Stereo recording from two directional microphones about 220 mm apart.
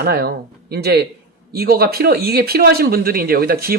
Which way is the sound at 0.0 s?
45° right (ahead or behind).